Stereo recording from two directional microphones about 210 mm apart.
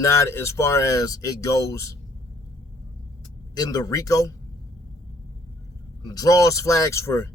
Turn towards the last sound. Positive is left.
turn(degrees=15)  # may be behind; listen again after turning